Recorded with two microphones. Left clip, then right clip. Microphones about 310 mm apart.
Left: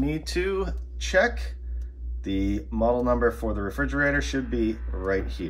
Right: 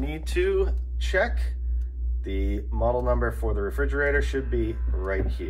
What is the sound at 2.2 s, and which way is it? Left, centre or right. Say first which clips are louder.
Speech: left 4 dB; left.